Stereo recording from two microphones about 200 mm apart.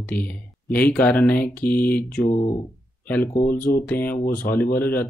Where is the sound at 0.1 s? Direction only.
10° left (ahead or behind).